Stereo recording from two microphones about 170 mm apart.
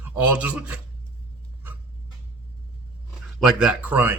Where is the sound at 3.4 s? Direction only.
5° right (ahead or behind).